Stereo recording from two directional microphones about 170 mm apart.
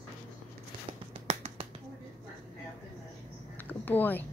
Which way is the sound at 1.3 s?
40° right (ahead or behind).